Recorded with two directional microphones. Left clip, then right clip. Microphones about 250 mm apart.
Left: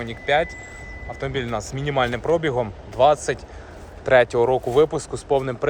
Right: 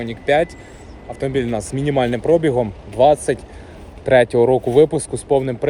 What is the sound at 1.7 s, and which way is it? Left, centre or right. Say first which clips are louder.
Speech: right 4 dB; left.